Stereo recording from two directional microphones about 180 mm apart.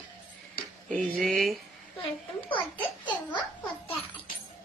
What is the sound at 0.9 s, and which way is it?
Speech, 5° left (ahead or behind).